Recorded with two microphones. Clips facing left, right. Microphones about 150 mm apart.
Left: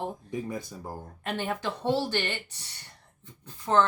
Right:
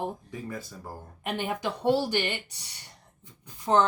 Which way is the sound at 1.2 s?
15° right (ahead or behind).